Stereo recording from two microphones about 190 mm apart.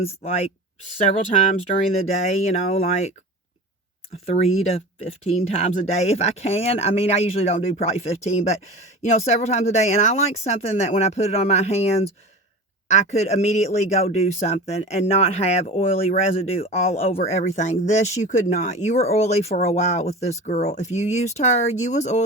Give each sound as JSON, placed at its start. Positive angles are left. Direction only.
{"t": 0.0, "sound": "speech", "side_deg": 35}
{"t": 4.3, "sound": "speech", "side_deg": 35}